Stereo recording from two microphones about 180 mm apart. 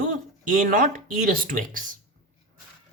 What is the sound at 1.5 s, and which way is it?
Speech, 50° right (ahead or behind).